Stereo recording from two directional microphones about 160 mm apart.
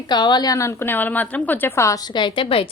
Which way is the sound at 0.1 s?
25° left (ahead or behind).